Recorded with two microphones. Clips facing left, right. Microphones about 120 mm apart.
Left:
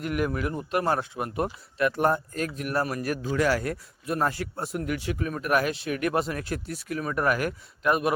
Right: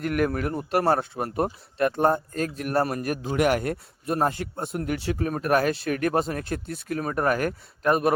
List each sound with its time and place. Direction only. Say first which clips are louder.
0.0 s speech: right 3 dB; 50° right (ahead or behind)
3.3 s speech: right 3 dB; 25° right (ahead or behind); by 8.1 s 40° right (ahead or behind)